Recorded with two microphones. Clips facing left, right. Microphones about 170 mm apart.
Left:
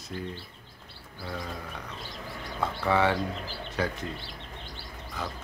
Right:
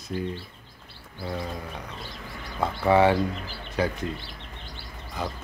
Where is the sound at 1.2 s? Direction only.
25° right (ahead or behind).